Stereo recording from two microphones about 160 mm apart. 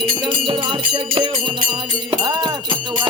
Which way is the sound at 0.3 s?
30° right (ahead or behind).